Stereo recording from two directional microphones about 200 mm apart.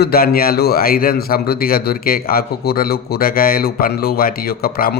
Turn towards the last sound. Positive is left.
turn(degrees=50)  # may be behind; listen again after turning